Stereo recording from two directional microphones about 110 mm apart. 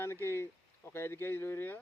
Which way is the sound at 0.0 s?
20° left (ahead or behind).